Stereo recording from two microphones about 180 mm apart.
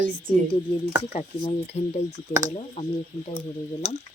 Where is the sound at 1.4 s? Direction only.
35° left (ahead or behind).